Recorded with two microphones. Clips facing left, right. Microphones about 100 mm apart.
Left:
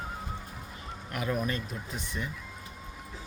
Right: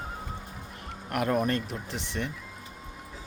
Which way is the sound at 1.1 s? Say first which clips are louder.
Right 5 dB; 60° right (ahead or behind).